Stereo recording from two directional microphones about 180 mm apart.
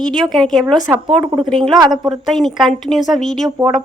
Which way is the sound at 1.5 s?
Centre (ahead or behind).